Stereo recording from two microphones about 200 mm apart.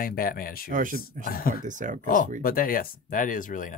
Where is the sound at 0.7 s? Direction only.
45° right (ahead or behind).